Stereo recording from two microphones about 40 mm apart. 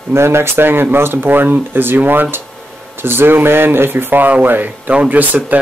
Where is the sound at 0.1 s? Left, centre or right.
Right.